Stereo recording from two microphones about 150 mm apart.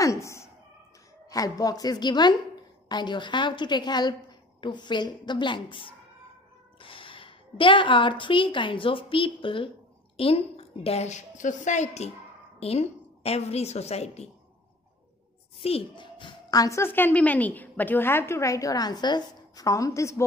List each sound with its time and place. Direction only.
0.0 s a sound: 20° left (ahead or behind)
1.3 s a woman's voice: 25° left (ahead or behind); by 14.3 s 45° left (ahead or behind)
15.6 s a woman's voice: 35° left (ahead or behind); by 20.2 s 20° left (ahead or behind)